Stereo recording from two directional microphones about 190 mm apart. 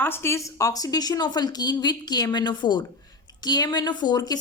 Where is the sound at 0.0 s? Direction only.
10° left (ahead or behind).